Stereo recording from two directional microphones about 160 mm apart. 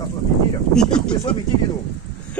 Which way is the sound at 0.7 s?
5° left (ahead or behind).